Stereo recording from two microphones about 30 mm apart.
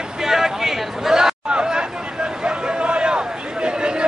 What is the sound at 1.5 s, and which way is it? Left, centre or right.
Chatter, right.